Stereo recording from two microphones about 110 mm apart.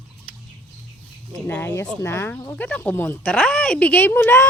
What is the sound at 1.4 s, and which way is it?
Speech, 20° left (ahead or behind).